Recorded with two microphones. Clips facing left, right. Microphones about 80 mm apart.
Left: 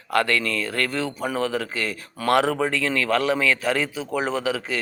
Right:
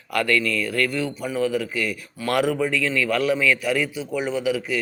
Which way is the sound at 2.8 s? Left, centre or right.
Left.